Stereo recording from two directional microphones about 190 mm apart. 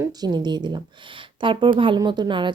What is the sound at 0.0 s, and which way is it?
A woman's voice, 20° right (ahead or behind).